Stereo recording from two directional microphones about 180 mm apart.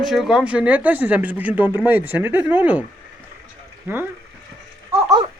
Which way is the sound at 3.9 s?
15° right (ahead or behind).